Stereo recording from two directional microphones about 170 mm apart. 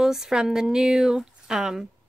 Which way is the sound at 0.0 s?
5° right (ahead or behind).